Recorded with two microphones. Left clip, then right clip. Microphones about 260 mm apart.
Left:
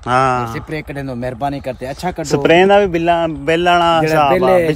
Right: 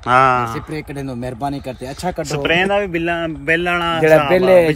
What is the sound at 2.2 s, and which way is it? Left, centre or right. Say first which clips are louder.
Speech: left 6 dB; left.